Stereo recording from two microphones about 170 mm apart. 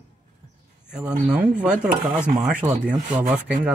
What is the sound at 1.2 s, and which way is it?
Speech, 10° right (ahead or behind).